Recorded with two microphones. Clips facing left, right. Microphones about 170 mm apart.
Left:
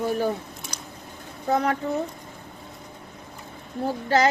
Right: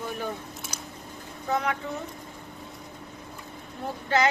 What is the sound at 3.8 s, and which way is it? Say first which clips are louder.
Speech: left 4 dB; 35° left (ahead or behind).